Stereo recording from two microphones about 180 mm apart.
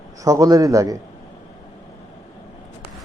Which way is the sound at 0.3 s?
20° right (ahead or behind).